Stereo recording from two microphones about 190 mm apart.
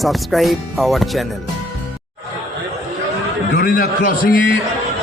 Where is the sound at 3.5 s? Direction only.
50° left (ahead or behind).